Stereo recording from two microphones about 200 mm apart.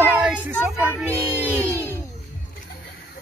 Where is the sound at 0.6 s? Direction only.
10° right (ahead or behind).